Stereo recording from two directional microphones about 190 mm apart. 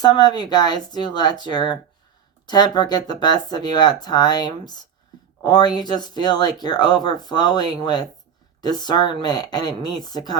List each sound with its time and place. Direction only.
0.0 s speech: 20° left (ahead or behind)